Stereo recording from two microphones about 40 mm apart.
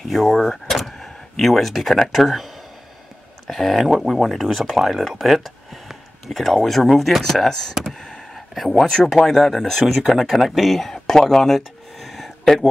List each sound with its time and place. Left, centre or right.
0.0 s speech: centre
0.4 s vehicle: centre
1.4 s speech: centre
7.4 s speech: centre
7.8 s a sound: centre
8.4 s speech: centre